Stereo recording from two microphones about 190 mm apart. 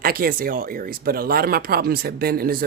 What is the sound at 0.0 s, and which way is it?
Speech, 50° right (ahead or behind).